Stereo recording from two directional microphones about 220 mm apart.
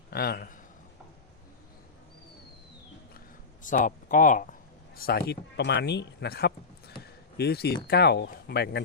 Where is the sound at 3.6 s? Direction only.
35° left (ahead or behind).